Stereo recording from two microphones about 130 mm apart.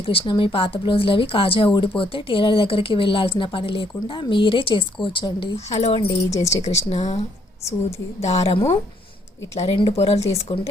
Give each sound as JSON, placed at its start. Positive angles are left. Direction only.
{"t": 0.0, "sound": "a woman's voice", "side_deg": 45}
{"t": 5.5, "sound": "a woman's voice", "side_deg": 55}